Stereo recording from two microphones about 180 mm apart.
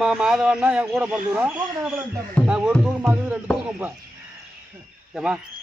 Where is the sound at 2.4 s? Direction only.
5° right (ahead or behind).